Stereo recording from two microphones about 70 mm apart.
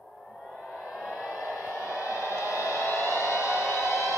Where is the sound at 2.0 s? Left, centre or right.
Left.